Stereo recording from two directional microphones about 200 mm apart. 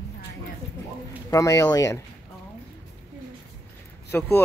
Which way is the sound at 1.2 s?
15° left (ahead or behind).